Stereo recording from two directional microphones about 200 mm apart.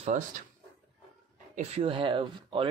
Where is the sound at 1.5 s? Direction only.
30° right (ahead or behind).